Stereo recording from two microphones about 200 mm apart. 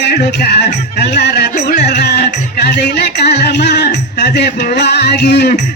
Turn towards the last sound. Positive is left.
turn(degrees=55)  # may be behind; listen again after turning